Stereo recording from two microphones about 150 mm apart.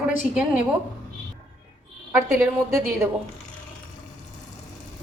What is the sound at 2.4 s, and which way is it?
Speech, 20° right (ahead or behind).